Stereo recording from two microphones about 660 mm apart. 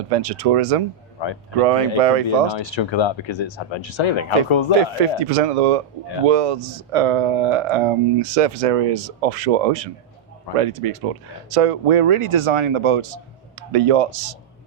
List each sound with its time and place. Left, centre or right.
0.1 s speech: right
1.2 s speech: left
2.0 s speech: right
2.5 s speech: left
4.8 s speech: right